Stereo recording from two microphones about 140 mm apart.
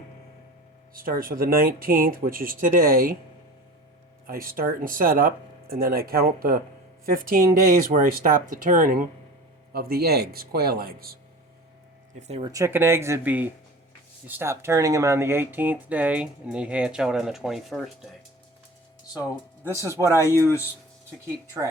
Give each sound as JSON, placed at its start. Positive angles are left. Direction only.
{"t": 0.9, "sound": "speech", "side_deg": -90}
{"t": 4.3, "sound": "speech", "side_deg": -90}
{"t": 9.7, "sound": "speech", "side_deg": -90}
{"t": 12.5, "sound": "speech", "side_deg": -20}
{"t": 19.1, "sound": "speech", "side_deg": -10}
{"t": 19.8, "sound": "speech", "side_deg": -20}
{"t": 20.4, "sound": "speech", "side_deg": 20}